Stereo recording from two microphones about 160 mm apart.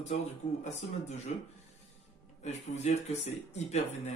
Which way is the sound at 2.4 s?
45° left (ahead or behind).